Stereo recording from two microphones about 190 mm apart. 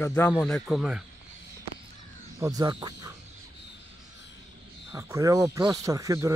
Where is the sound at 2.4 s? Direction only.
20° right (ahead or behind).